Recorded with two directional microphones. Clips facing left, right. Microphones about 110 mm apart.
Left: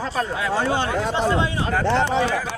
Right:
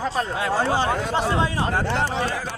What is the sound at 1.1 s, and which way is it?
Speech, 40° right (ahead or behind).